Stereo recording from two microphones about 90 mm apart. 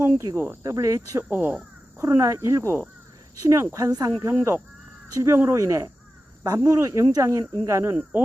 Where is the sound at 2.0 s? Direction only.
35° right (ahead or behind).